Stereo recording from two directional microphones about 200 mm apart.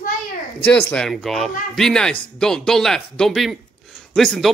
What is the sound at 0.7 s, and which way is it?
A man's voice, 5° left (ahead or behind).